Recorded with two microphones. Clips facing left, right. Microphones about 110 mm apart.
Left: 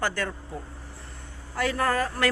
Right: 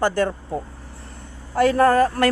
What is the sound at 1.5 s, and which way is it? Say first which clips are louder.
Speech: right 10 dB; 45° right (ahead or behind).